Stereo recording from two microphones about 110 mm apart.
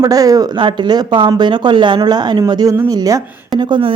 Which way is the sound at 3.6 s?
50° right (ahead or behind).